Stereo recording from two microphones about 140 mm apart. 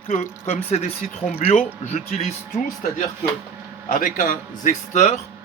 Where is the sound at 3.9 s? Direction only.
70° left (ahead or behind).